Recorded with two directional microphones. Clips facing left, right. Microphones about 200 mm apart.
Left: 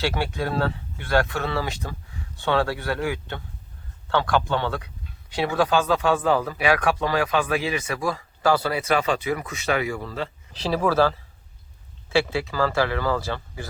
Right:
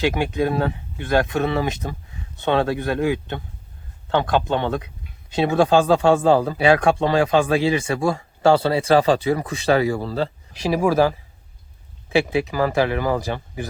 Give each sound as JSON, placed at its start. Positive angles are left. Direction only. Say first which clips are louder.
{"t": 0.0, "sound": "a man's voice", "louder": "right 5 dB", "side_deg": -15}
{"t": 10.5, "sound": "speech", "louder": "right 3 dB", "side_deg": -10}